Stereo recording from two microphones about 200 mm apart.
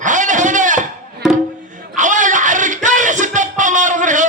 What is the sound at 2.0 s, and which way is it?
Music, 40° right (ahead or behind).